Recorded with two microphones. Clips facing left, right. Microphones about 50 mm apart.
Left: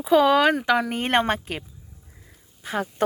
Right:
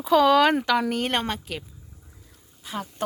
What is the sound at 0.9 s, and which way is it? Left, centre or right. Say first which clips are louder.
Speech: left 4 dB; left.